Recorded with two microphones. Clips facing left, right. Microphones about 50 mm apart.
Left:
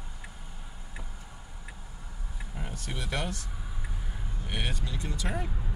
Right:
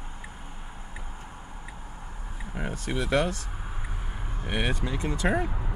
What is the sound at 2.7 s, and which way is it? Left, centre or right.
Speech, right.